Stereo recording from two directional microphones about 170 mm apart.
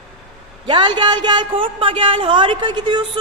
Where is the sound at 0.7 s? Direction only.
25° right (ahead or behind).